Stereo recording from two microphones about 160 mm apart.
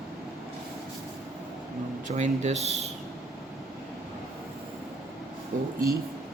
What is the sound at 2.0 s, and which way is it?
Speech, 45° right (ahead or behind).